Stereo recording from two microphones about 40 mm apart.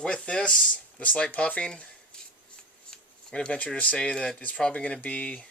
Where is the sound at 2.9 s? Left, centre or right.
Centre.